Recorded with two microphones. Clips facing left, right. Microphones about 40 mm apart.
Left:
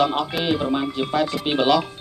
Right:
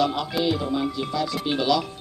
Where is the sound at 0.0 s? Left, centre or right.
Left.